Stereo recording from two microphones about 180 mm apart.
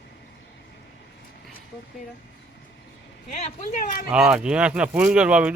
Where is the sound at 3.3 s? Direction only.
40° left (ahead or behind).